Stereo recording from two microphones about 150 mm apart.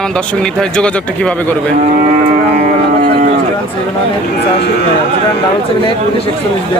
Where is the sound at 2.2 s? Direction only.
60° right (ahead or behind).